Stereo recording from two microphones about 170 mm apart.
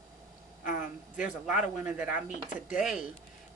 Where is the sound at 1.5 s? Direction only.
10° right (ahead or behind).